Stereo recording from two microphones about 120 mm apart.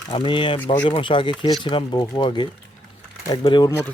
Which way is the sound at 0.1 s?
45° left (ahead or behind).